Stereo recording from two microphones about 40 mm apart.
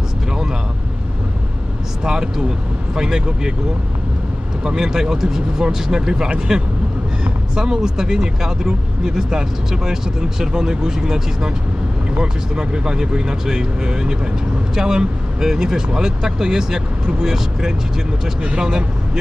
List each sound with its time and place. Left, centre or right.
2.0 s speech: centre
4.6 s speech: centre